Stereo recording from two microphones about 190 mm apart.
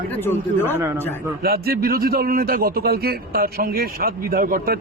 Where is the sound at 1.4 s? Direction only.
55° right (ahead or behind).